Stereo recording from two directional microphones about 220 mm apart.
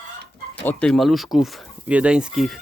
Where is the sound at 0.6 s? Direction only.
Centre (ahead or behind).